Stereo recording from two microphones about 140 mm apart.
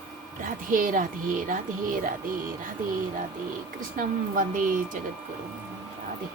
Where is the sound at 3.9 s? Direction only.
75° right (ahead or behind).